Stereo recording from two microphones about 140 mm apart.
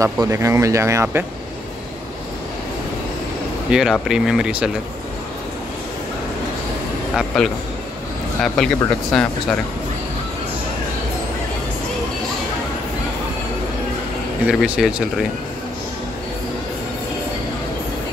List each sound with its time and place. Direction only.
0.0 s speech: 20° right (ahead or behind)
3.7 s speech: 5° right (ahead or behind)
7.2 s speech: 5° left (ahead or behind)
14.5 s speech: centre (ahead or behind)